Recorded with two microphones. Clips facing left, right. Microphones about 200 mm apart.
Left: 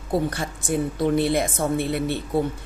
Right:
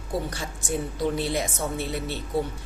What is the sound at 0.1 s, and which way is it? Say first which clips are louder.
Speech: left 6 dB; 55° left (ahead or behind).